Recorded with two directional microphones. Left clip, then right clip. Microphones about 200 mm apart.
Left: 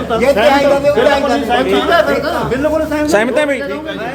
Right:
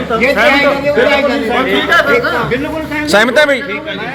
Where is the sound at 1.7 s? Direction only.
20° left (ahead or behind).